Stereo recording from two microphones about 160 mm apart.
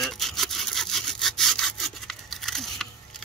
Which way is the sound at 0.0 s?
Centre (ahead or behind).